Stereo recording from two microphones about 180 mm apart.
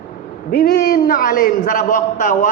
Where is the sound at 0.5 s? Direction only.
60° left (ahead or behind).